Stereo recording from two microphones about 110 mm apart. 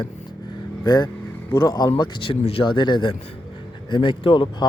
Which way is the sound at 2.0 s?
55° left (ahead or behind).